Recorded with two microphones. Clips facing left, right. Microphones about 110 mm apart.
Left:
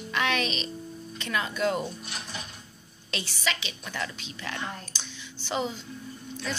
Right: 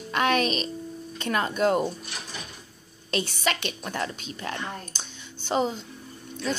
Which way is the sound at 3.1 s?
50° right (ahead or behind).